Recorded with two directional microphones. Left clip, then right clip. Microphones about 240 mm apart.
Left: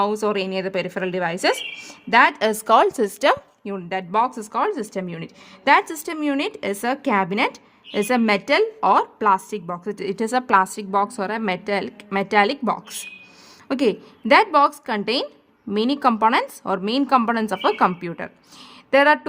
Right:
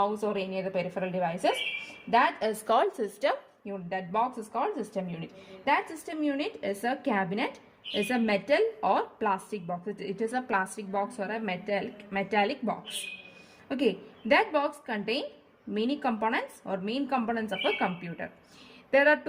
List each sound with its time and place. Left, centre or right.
0.0 s a woman's voice: left